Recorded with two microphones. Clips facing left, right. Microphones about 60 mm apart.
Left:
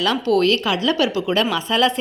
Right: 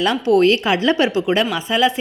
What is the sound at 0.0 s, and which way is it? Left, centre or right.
A woman's voice, right.